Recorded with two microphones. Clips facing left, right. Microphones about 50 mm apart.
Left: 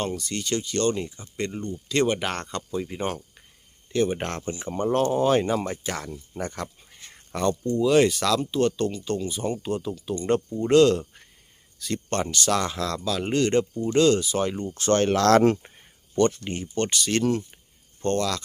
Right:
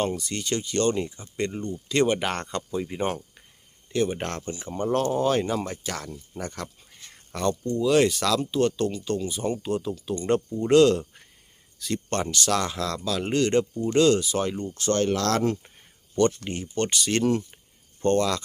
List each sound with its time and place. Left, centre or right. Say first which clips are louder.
0.0 s speech: right 1 dB; centre; by 4.8 s left
4.8 s speech: left 1 dB; centre
14.8 s speech: left 3 dB; left
15.8 s speech: even; centre